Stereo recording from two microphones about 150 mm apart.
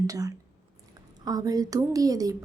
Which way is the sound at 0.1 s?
20° right (ahead or behind).